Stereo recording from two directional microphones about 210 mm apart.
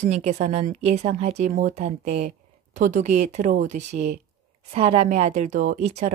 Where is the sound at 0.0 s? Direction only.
35° right (ahead or behind).